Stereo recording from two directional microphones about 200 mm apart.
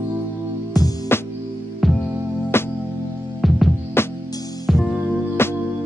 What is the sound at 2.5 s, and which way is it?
Music, 10° left (ahead or behind).